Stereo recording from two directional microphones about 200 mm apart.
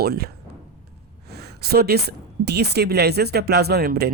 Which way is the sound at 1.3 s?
55° right (ahead or behind).